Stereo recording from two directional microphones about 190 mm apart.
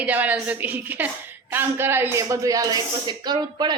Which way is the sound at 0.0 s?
10° right (ahead or behind).